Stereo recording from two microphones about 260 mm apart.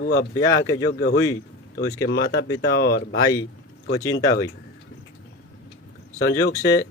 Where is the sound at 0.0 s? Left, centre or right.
Left.